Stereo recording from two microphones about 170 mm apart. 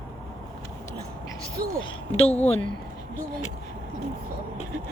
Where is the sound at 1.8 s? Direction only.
35° left (ahead or behind).